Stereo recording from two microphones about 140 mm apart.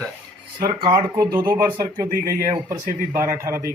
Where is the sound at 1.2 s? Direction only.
25° right (ahead or behind).